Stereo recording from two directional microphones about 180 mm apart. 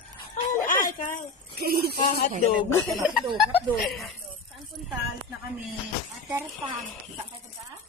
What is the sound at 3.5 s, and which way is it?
Speech, 5° right (ahead or behind).